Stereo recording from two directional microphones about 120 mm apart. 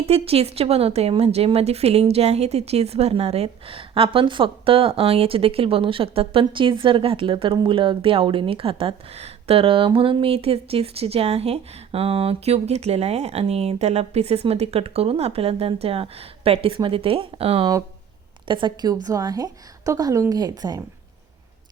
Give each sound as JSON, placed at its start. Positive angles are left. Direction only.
{"t": 0.0, "sound": "a woman's voice", "side_deg": -55}
{"t": 18.4, "sound": "a woman's voice", "side_deg": -40}